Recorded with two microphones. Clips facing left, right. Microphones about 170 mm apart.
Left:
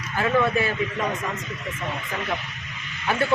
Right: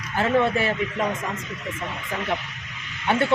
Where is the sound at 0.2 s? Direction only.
30° right (ahead or behind).